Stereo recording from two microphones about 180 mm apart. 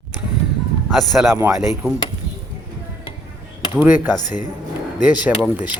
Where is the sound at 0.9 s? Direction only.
Centre (ahead or behind).